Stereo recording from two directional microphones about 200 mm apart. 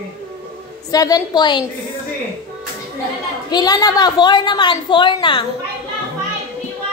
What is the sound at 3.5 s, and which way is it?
A woman's voice, 20° left (ahead or behind).